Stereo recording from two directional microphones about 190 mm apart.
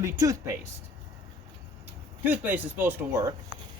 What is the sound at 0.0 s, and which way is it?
Speech, 15° right (ahead or behind).